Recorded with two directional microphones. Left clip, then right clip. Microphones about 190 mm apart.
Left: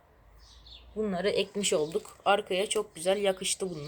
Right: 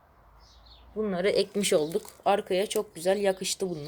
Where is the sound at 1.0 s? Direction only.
25° right (ahead or behind).